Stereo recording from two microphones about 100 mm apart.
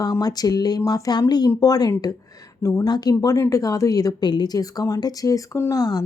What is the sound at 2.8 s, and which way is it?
Speech, 40° left (ahead or behind).